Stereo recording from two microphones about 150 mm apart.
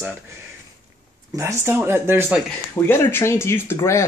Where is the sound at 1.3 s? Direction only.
15° right (ahead or behind).